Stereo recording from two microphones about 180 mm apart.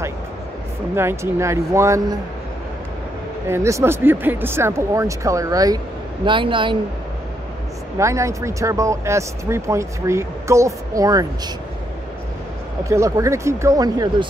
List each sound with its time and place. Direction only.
0.9 s speech: 15° right (ahead or behind)
3.4 s speech: 15° right (ahead or behind)
8.0 s speech: 15° right (ahead or behind)
12.8 s speech: 15° right (ahead or behind)